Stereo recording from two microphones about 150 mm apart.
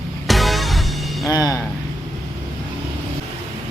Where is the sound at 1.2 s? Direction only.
25° left (ahead or behind).